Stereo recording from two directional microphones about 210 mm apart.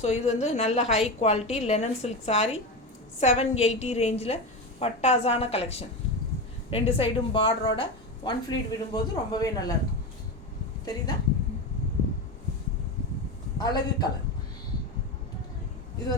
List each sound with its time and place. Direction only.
0.0 s a woman's voice: 30° left (ahead or behind)
13.6 s a woman's voice: 20° left (ahead or behind)